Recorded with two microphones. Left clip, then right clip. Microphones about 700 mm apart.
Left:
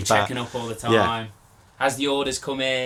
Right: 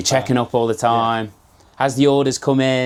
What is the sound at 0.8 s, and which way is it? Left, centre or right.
Speech, right.